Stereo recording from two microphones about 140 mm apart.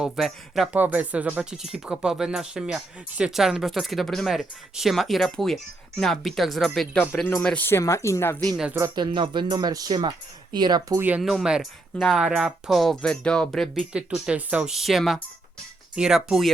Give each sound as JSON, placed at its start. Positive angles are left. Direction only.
{"t": 0.0, "sound": "speech", "side_deg": 0}
{"t": 7.0, "sound": "speech", "side_deg": 15}
{"t": 8.4, "sound": "speech", "side_deg": 5}
{"t": 9.0, "sound": "speech", "side_deg": -35}
{"t": 11.2, "sound": "speech", "side_deg": 0}
{"t": 13.9, "sound": "speech", "side_deg": -10}